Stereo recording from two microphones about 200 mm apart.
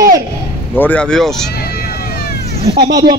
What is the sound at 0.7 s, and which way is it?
Speech, 10° left (ahead or behind).